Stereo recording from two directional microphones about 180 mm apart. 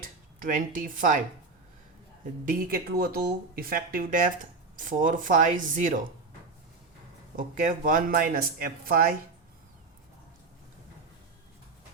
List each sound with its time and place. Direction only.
0.0 s speech: 50° right (ahead or behind)
2.4 s speech: 50° right (ahead or behind)
7.3 s speech: 45° right (ahead or behind)